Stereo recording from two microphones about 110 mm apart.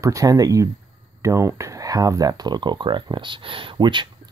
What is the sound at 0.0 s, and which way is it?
Speech, 30° right (ahead or behind).